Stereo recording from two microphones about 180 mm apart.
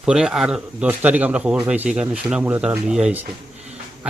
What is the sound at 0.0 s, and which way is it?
A man's voice, 5° right (ahead or behind).